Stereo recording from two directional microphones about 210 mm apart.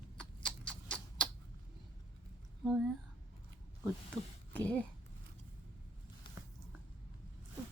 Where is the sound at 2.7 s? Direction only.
Centre (ahead or behind).